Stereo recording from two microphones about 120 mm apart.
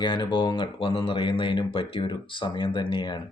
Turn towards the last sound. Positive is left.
turn(degrees=40)  # may be behind; listen again after turning